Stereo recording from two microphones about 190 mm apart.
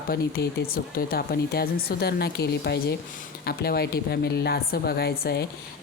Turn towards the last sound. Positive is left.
turn(degrees=60)  # may be behind; listen again after turning